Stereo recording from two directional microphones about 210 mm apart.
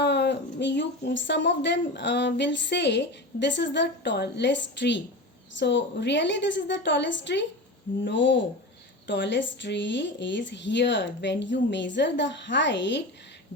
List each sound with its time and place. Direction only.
0.0 s speech: 55° left (ahead or behind)